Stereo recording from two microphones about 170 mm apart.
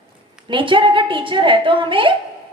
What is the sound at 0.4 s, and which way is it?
A woman's voice, 30° right (ahead or behind).